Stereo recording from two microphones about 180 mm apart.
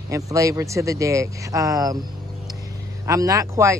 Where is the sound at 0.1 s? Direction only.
20° right (ahead or behind).